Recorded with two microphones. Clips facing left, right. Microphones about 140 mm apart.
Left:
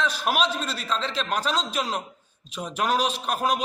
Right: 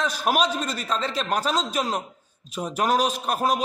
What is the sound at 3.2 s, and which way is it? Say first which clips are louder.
Speech: right 2 dB; 40° right (ahead or behind).